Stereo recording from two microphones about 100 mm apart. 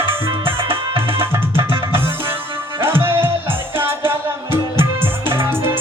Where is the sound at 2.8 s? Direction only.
25° right (ahead or behind).